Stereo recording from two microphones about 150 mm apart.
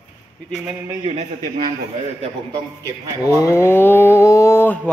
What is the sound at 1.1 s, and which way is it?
Speech, 40° right (ahead or behind).